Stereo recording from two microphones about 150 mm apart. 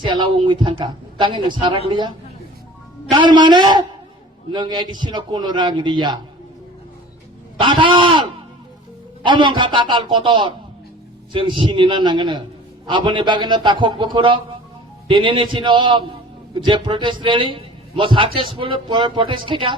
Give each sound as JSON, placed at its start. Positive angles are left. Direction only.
{"t": 0.0, "sound": "a man's voice", "side_deg": -30}
{"t": 3.1, "sound": "a man's voice", "side_deg": -30}
{"t": 7.6, "sound": "a man's voice", "side_deg": -35}